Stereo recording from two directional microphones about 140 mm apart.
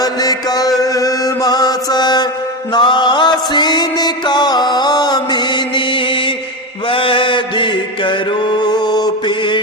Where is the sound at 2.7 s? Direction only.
35° left (ahead or behind).